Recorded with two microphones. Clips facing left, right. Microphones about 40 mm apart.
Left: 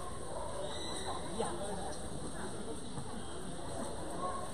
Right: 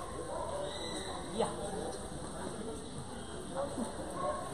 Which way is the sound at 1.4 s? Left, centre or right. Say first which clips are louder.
Right 4 dB; right.